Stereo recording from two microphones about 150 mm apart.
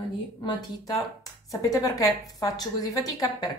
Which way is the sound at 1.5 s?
20° left (ahead or behind).